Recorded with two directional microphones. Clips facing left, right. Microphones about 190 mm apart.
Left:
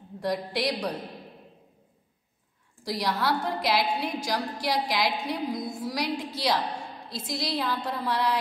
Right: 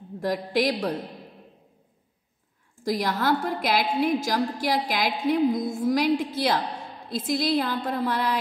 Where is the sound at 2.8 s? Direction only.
50° right (ahead or behind).